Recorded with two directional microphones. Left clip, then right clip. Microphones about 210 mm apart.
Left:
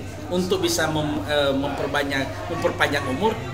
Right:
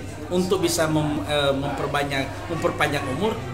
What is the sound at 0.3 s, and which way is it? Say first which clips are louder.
A man's voice: even; 15° right (ahead or behind).